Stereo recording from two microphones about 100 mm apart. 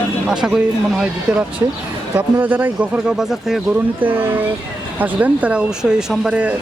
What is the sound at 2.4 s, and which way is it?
Speech, 20° right (ahead or behind).